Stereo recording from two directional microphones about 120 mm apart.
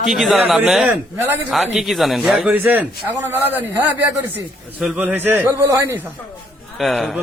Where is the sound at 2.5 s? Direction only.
15° right (ahead or behind).